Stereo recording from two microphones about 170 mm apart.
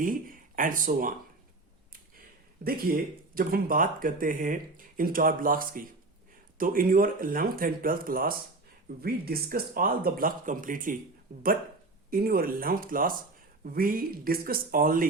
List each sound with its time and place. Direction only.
0.0 s speech: 55° right (ahead or behind)
2.6 s speech: 60° right (ahead or behind)
12.1 s speech: 60° right (ahead or behind)